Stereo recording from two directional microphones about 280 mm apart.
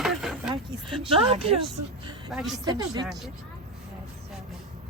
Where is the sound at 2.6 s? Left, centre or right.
Centre.